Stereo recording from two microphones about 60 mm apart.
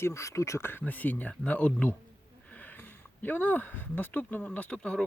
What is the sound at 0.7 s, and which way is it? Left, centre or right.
Speech, left.